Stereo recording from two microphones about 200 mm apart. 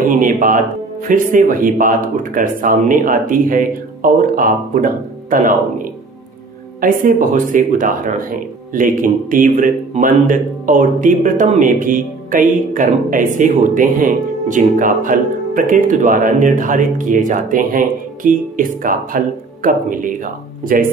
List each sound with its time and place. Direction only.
0.1 s speech: 40° right (ahead or behind)
6.8 s speech: 40° right (ahead or behind)